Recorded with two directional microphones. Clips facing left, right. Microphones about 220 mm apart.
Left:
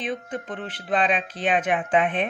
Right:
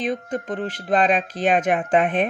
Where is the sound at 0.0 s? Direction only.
40° right (ahead or behind).